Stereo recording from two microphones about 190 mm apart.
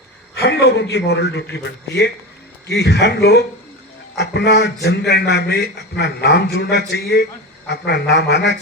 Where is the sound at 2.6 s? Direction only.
65° left (ahead or behind).